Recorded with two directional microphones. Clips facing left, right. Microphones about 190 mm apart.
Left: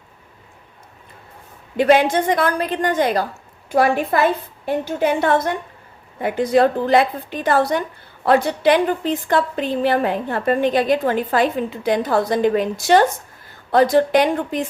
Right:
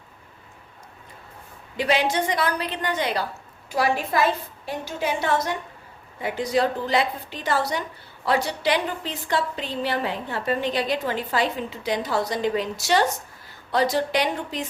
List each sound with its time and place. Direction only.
1.7 s a woman's voice: 50° left (ahead or behind)